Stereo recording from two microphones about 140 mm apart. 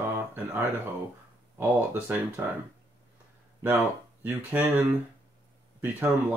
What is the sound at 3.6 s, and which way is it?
Speech, 15° right (ahead or behind).